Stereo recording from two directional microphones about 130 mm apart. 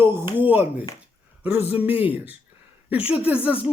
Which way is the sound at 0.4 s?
15° right (ahead or behind).